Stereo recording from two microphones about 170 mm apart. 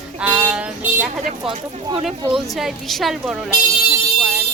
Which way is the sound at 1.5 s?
35° right (ahead or behind).